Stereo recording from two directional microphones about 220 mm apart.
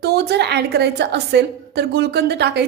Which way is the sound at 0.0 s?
45° right (ahead or behind).